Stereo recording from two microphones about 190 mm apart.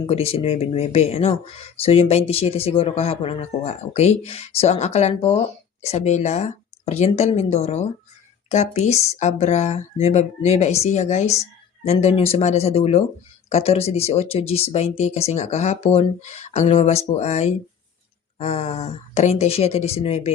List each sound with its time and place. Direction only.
0.0 s speech: 30° left (ahead or behind)